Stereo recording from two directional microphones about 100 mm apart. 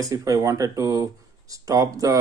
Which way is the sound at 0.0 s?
35° right (ahead or behind).